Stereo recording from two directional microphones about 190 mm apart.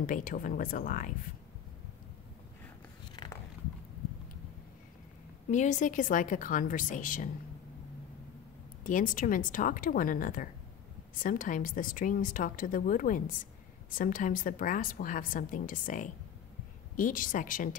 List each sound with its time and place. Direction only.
0.0 s a woman's voice: 45° left (ahead or behind)
3.2 s biting: 20° left (ahead or behind)
5.5 s a woman's voice: 40° left (ahead or behind)
8.8 s a woman's voice: 45° left (ahead or behind)